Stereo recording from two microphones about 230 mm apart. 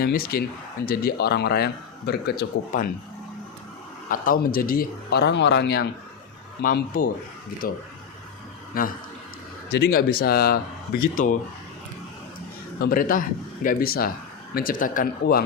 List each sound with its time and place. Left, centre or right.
0.0 s a man's voice: left
4.1 s a man's voice: left
12.8 s a man's voice: left